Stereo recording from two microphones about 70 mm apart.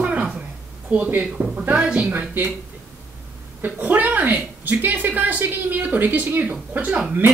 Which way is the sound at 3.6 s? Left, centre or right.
Right.